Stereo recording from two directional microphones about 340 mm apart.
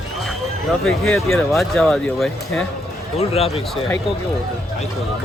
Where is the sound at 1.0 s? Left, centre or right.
Centre.